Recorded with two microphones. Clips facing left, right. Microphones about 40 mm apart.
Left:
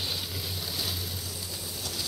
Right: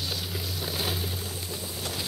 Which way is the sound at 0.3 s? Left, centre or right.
Right.